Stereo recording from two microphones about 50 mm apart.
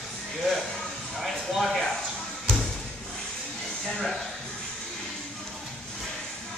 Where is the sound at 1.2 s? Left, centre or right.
Centre.